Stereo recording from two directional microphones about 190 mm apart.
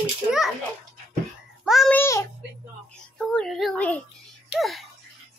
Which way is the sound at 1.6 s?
Centre (ahead or behind).